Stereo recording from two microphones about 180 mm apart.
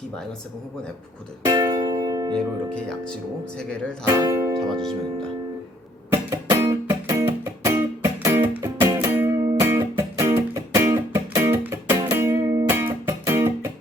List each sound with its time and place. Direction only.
1.5 s music: 15° right (ahead or behind)
2.3 s speech: 5° left (ahead or behind)
4.0 s speech: 15° right (ahead or behind)
6.1 s music: 15° right (ahead or behind)